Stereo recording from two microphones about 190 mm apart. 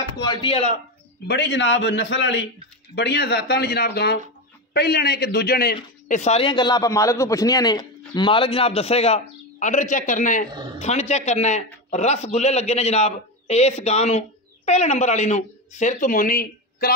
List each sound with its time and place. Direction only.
0.2 s a man's voice: 25° left (ahead or behind)
1.2 s a man's voice: 65° left (ahead or behind)
6.0 s a man's voice: 40° left (ahead or behind)
10.5 s speech: 20° right (ahead or behind)
10.8 s a man's voice: 35° left (ahead or behind)